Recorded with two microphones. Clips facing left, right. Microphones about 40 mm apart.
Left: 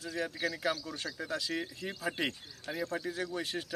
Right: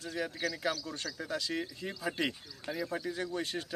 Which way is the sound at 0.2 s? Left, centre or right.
Centre.